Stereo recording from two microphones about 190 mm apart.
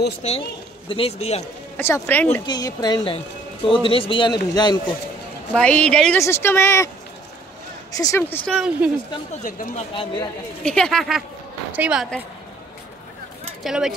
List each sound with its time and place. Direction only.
0.2 s a man's voice: 35° left (ahead or behind)
1.8 s speech: 10° left (ahead or behind)
2.4 s a man's voice: 20° left (ahead or behind)
5.5 s speech: 5° left (ahead or behind)
7.9 s speech: 20° left (ahead or behind)
8.2 s speech: 5° left (ahead or behind)
9.4 s speech: 45° left (ahead or behind)
9.9 s a man's voice: 20° left (ahead or behind)
10.6 s speech: 5° left (ahead or behind)
13.6 s speech: centre (ahead or behind)